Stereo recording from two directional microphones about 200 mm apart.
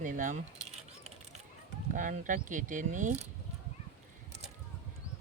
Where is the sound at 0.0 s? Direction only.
40° right (ahead or behind).